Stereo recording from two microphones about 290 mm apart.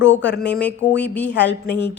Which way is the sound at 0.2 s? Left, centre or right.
Left.